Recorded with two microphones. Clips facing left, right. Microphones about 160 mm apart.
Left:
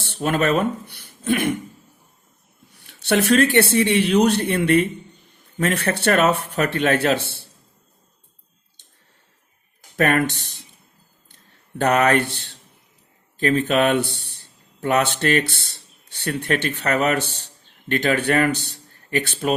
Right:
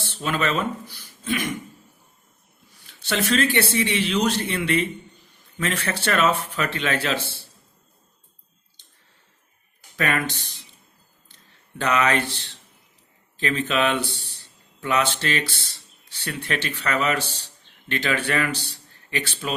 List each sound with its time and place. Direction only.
0.1 s speech: 55° left (ahead or behind)
2.7 s speech: 60° left (ahead or behind)
10.0 s speech: 55° left (ahead or behind)
11.8 s speech: 55° left (ahead or behind)